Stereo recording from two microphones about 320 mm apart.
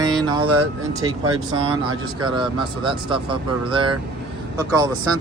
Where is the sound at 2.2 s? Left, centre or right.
Centre.